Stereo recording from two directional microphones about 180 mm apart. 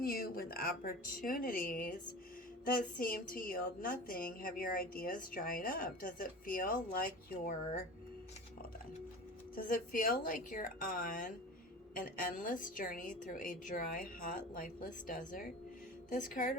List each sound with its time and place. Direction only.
0.0 s speech: 55° left (ahead or behind)
3.0 s a woman's voice: 50° left (ahead or behind)
9.6 s a woman's voice: 50° left (ahead or behind)